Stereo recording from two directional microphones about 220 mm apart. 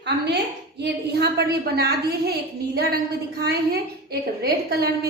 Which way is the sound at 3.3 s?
45° right (ahead or behind).